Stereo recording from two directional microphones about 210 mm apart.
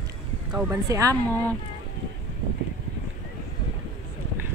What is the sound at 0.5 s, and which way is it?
Speech, 15° right (ahead or behind).